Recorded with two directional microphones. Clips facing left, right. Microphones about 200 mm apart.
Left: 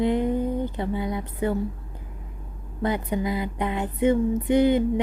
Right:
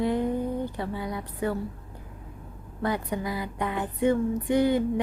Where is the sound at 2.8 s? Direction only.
20° left (ahead or behind).